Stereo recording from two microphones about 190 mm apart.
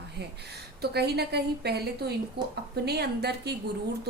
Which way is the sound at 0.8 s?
55° right (ahead or behind).